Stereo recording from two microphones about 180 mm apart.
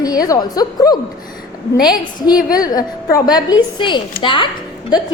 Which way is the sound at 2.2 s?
20° left (ahead or behind).